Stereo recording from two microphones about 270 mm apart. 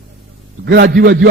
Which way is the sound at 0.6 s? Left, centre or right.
Right.